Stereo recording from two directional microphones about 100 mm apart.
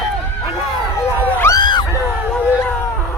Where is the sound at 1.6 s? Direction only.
50° left (ahead or behind).